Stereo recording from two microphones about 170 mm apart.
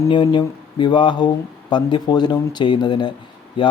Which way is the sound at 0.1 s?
30° left (ahead or behind).